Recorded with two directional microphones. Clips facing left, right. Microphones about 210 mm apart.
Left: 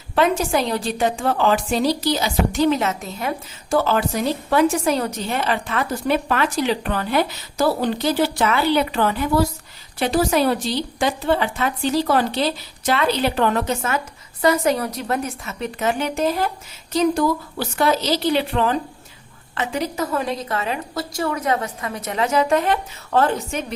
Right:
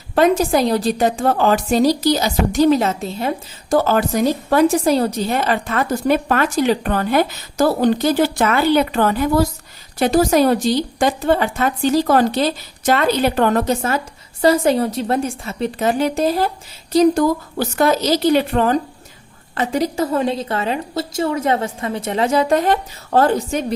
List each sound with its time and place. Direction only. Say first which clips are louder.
0.2 s a woman's voice: right 4 dB; 40° right (ahead or behind)